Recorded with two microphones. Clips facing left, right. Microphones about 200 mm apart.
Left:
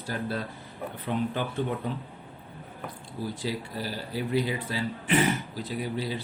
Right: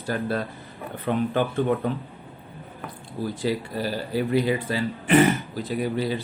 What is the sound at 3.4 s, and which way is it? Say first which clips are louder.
Speech: right 9 dB; 60° right (ahead or behind).